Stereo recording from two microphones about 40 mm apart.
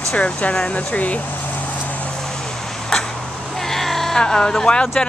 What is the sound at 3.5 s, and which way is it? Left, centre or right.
Vehicle, centre.